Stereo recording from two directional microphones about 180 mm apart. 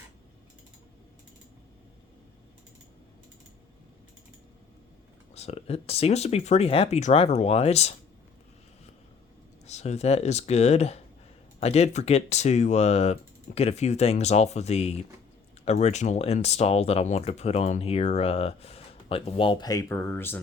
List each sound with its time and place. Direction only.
5.3 s speech: 35° left (ahead or behind)
9.6 s speech: 40° left (ahead or behind); by 20.4 s 10° left (ahead or behind)